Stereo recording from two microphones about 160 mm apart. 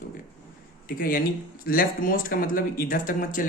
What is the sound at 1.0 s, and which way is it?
Speech, 65° left (ahead or behind).